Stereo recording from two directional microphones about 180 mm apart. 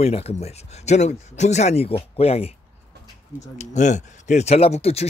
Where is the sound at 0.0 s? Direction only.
35° left (ahead or behind).